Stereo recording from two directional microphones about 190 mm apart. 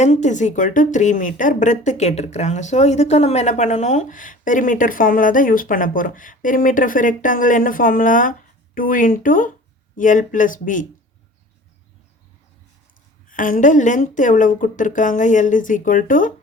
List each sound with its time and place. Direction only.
0.0 s a woman's voice: 40° left (ahead or behind)
13.2 s a woman's voice: 45° left (ahead or behind)